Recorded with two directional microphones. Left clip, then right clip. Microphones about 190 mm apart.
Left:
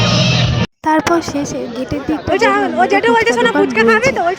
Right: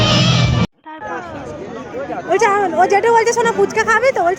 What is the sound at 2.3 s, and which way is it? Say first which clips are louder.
Speech: even; 10° right (ahead or behind).